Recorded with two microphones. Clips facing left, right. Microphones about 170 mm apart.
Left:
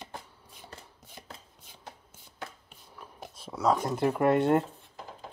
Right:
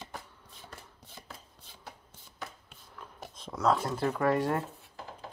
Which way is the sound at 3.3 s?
10° left (ahead or behind).